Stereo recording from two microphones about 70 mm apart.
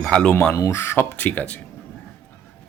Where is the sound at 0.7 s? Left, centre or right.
Left.